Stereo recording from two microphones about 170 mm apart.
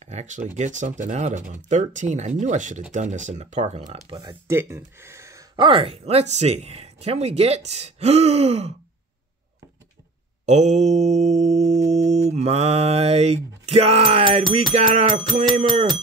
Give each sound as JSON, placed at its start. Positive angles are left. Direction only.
{"t": 0.0, "sound": "speech", "side_deg": -40}
{"t": 4.2, "sound": "speech", "side_deg": -25}
{"t": 4.6, "sound": "speech", "side_deg": -15}
{"t": 5.6, "sound": "speech", "side_deg": -30}
{"t": 10.4, "sound": "mantra", "side_deg": -40}
{"t": 14.5, "sound": "speech", "side_deg": -40}